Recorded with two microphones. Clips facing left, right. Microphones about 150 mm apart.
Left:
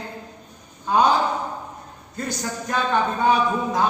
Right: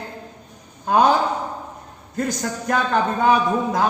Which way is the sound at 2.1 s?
55° right (ahead or behind).